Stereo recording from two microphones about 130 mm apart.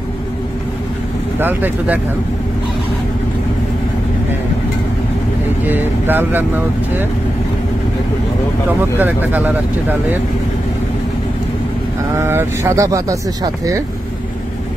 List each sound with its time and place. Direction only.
1.4 s speech: 15° right (ahead or behind)
5.7 s speech: 15° right (ahead or behind)
8.9 s speech: 15° right (ahead or behind)
12.2 s speech: 20° right (ahead or behind)